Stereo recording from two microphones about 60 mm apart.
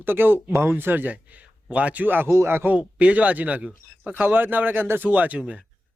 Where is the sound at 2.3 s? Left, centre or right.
Right.